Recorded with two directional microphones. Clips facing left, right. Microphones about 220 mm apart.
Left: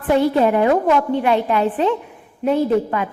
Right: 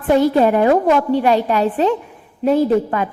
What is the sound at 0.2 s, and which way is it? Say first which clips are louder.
A woman's voice: right 1 dB; 40° right (ahead or behind).